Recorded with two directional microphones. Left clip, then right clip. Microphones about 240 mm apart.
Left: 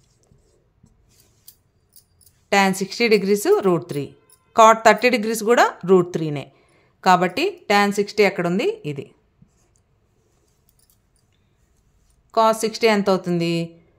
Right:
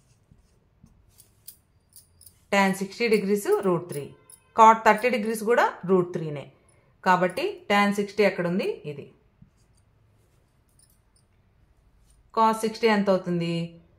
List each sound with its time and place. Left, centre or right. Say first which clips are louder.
2.5 s a woman's voice: left 5 dB; left
12.3 s a woman's voice: left 5 dB; left